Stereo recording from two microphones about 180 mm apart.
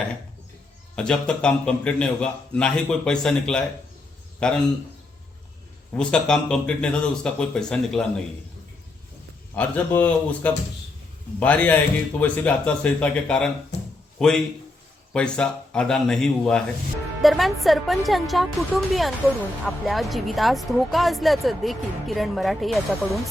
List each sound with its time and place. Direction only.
0.9 s speech: 5° left (ahead or behind)
5.9 s speech: 5° left (ahead or behind)
9.6 s speech: 10° left (ahead or behind)
13.7 s a sound: 70° left (ahead or behind)
14.2 s a man's voice: 5° left (ahead or behind)